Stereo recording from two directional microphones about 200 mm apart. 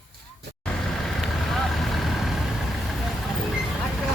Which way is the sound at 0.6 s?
5° left (ahead or behind).